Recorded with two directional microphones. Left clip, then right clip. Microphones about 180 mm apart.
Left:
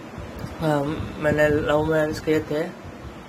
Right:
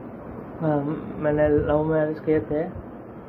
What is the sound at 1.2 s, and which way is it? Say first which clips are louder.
Speech: left 1 dB; 20° left (ahead or behind).